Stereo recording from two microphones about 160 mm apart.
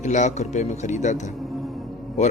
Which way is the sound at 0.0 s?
50° left (ahead or behind).